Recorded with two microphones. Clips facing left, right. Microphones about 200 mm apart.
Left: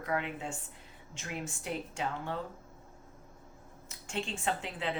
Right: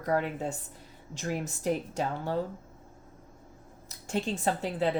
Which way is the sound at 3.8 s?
40° right (ahead or behind).